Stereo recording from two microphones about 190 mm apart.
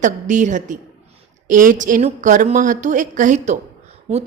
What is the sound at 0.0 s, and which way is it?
A woman's voice, 40° right (ahead or behind).